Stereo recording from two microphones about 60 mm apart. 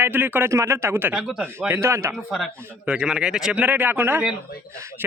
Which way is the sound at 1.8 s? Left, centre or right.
Right.